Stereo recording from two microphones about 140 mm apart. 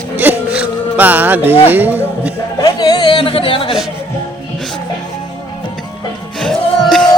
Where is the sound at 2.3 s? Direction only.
25° left (ahead or behind).